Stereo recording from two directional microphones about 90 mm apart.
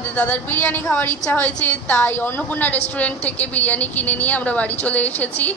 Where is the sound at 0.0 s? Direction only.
15° left (ahead or behind).